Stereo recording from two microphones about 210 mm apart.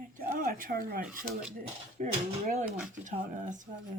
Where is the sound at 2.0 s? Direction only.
35° right (ahead or behind).